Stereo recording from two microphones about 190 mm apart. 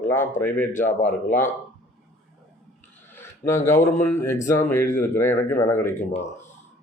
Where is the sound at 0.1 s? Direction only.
10° left (ahead or behind).